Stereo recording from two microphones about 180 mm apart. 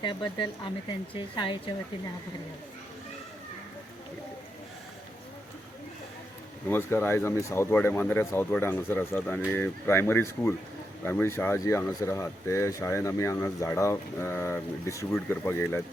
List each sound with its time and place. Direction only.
0.0 s speech: 25° left (ahead or behind)
6.7 s speech: 15° left (ahead or behind)